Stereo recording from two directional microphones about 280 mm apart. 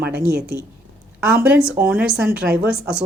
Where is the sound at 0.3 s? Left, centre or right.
Right.